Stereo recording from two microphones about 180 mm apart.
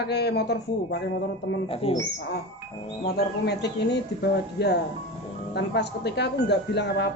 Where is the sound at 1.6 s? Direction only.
30° left (ahead or behind).